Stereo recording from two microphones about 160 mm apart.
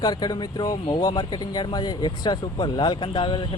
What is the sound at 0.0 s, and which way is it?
Speech, 25° left (ahead or behind).